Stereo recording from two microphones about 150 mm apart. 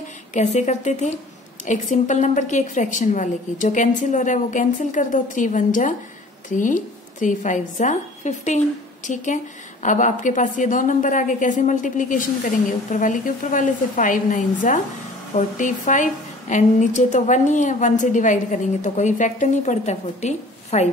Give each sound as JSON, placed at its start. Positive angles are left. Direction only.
{"t": 0.3, "sound": "a woman's voice", "side_deg": 50}